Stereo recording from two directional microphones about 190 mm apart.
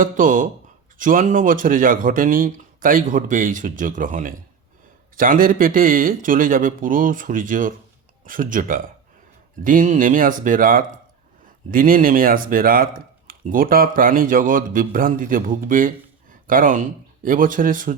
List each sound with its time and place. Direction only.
0.0 s speech: 45° right (ahead or behind)